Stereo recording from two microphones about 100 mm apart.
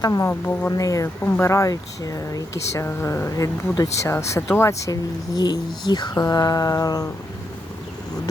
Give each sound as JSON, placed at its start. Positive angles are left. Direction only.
{"t": 0.0, "sound": "speech", "side_deg": 35}
{"t": 0.3, "sound": "speech", "side_deg": 20}
{"t": 0.7, "sound": "speech", "side_deg": 35}
{"t": 2.8, "sound": "speech", "side_deg": 25}
{"t": 4.8, "sound": "speech", "side_deg": 40}